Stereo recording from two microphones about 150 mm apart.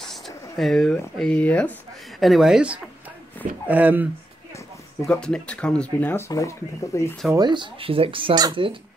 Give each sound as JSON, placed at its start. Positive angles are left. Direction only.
{"t": 0.0, "sound": "a woman's voice", "side_deg": 0}
{"t": 5.0, "sound": "speech", "side_deg": 10}
{"t": 7.3, "sound": "speech", "side_deg": -30}